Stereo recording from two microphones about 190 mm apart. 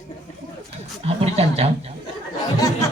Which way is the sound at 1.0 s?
35° right (ahead or behind).